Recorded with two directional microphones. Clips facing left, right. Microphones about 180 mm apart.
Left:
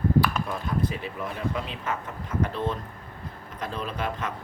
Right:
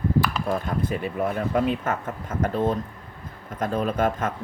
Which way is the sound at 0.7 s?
50° right (ahead or behind).